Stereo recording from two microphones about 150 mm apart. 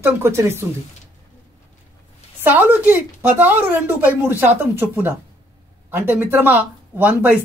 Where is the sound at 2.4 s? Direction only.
10° right (ahead or behind).